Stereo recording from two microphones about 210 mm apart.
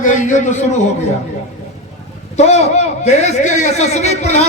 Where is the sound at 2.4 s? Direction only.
30° left (ahead or behind).